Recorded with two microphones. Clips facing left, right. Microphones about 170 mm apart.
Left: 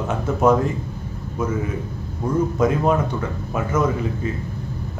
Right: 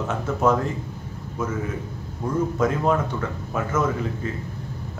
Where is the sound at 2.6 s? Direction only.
15° left (ahead or behind).